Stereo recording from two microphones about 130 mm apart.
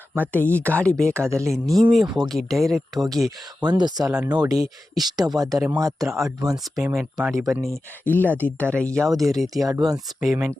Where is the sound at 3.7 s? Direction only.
35° right (ahead or behind).